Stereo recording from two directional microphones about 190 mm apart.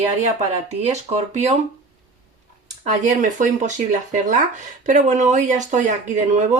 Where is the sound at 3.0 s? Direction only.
40° right (ahead or behind).